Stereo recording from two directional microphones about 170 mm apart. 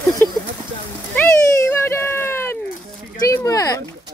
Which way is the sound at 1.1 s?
15° left (ahead or behind).